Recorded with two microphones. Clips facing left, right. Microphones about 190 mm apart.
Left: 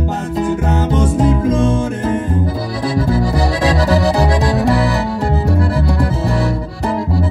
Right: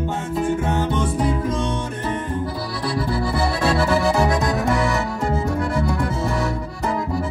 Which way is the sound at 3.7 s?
35° left (ahead or behind).